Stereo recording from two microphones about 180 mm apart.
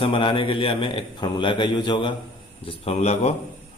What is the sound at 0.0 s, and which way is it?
A man's voice, 30° left (ahead or behind).